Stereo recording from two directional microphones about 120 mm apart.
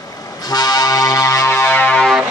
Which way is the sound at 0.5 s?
30° left (ahead or behind).